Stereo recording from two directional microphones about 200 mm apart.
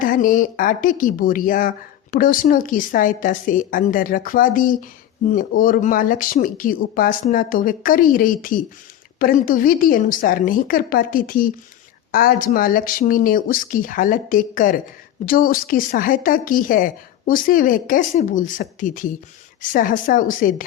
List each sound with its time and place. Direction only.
0.0 s speech: 40° left (ahead or behind)